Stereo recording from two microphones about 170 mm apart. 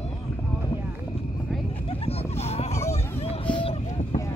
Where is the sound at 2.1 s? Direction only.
40° left (ahead or behind).